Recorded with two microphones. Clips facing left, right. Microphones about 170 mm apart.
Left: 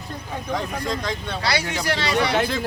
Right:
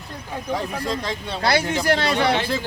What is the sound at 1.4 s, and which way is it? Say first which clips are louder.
Speech: right 5 dB; 50° right (ahead or behind).